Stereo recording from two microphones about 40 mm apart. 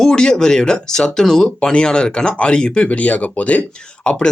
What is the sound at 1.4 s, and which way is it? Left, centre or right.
Speech, left.